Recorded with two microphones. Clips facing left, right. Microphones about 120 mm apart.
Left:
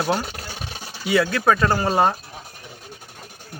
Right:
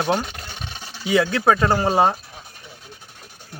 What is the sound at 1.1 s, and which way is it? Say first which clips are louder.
Speech: right 1 dB; 20° right (ahead or behind).